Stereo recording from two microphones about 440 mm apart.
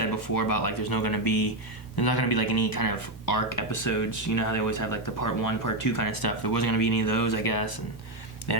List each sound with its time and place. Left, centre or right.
0.3 s speech: left